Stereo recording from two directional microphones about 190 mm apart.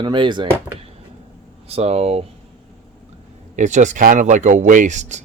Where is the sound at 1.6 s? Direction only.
35° right (ahead or behind).